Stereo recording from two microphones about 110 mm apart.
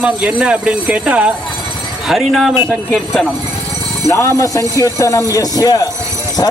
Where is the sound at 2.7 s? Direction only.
10° left (ahead or behind).